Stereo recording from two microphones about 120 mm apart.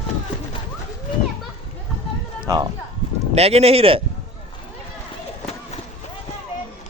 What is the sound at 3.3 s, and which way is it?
Speech, 60° right (ahead or behind).